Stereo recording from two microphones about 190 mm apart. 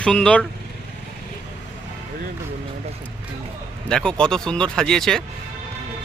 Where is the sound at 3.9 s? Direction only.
5° left (ahead or behind).